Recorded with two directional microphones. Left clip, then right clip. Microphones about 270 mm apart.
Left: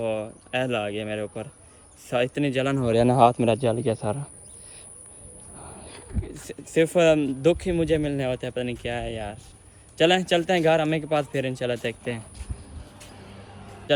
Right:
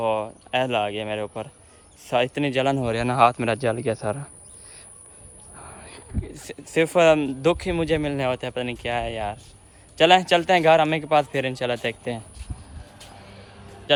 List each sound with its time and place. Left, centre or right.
0.0 s speech: centre
2.9 s speech: centre
5.5 s a sound: right
6.3 s speech: centre